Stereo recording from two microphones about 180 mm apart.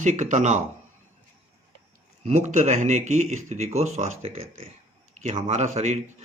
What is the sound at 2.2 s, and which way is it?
Speech, 40° right (ahead or behind).